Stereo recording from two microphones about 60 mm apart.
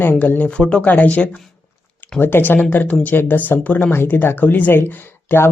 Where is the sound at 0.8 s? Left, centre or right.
Left.